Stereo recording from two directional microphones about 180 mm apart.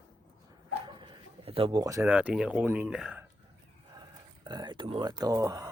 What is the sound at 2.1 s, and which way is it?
Speech, 5° right (ahead or behind).